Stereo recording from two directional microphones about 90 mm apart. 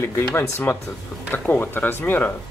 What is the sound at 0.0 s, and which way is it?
Speech, 25° left (ahead or behind).